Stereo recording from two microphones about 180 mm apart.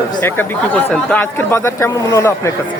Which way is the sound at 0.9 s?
10° left (ahead or behind).